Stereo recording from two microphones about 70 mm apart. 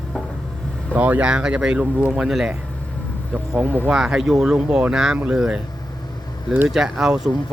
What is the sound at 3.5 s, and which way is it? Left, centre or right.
Speech, right.